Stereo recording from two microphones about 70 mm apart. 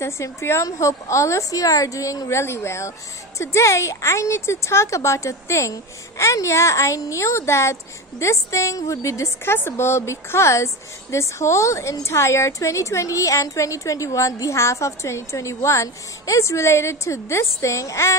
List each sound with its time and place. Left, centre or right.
0.0 s a woman's voice: left